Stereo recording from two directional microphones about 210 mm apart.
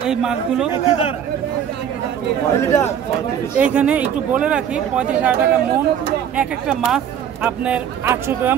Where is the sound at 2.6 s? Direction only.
10° left (ahead or behind).